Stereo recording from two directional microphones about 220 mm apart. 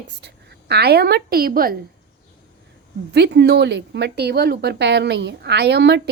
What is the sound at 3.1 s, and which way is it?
A woman's voice, 50° right (ahead or behind).